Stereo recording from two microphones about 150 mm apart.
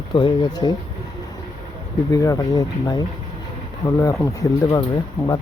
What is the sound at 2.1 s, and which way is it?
Speech, 20° left (ahead or behind).